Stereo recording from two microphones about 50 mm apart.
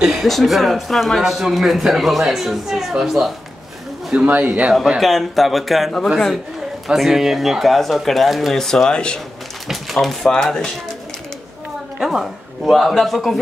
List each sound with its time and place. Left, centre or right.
0.0 s speech: centre
0.3 s a man's voice: centre
4.1 s speech: right
5.0 s a man's voice: centre
6.9 s a man's voice: centre
8.6 s speech: centre
9.7 s speech: centre
12.0 s a man's voice: centre